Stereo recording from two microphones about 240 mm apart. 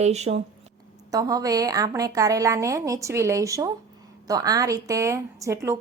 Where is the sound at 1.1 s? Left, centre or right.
Centre.